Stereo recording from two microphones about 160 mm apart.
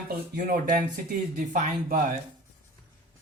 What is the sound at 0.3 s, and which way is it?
Speech, 60° right (ahead or behind).